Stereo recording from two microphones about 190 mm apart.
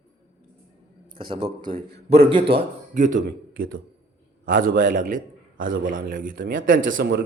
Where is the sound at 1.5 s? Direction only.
45° right (ahead or behind).